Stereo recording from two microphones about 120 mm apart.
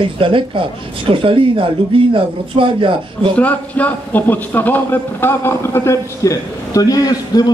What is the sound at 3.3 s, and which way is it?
A man's voice, 10° left (ahead or behind).